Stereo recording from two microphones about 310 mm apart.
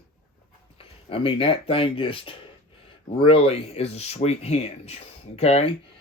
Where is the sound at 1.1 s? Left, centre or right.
Centre.